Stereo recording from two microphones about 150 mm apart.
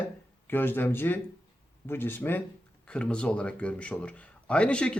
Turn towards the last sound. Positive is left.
turn(degrees=5)  # may be behind; listen again after turning